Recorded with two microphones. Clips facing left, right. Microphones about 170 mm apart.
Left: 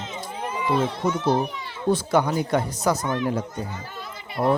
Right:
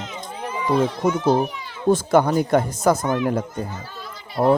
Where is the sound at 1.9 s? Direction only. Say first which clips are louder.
Right 4 dB; 50° right (ahead or behind).